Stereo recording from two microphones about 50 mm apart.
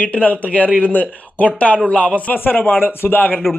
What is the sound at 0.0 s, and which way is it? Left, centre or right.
A man's voice, left.